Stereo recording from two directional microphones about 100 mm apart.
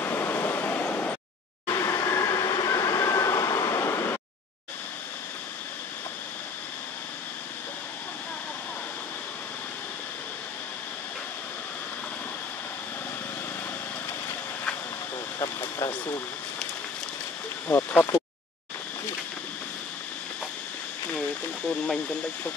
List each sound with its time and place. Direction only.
0.0 s waves: 25° left (ahead or behind)
1.7 s train: 35° left (ahead or behind)
15.3 s a sound: 40° left (ahead or behind)
17.6 s speech: 20° left (ahead or behind)